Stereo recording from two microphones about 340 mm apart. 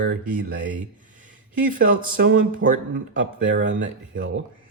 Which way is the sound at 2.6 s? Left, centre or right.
Right.